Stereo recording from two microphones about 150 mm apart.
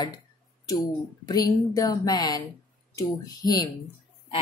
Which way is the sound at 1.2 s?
25° left (ahead or behind).